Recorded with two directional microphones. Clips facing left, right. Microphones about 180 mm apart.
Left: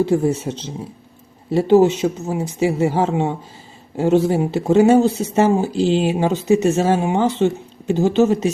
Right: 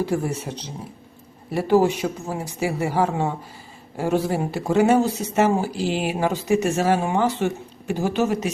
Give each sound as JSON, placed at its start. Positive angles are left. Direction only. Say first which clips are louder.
{"t": 0.0, "sound": "speech", "louder": "left 7 dB", "side_deg": 25}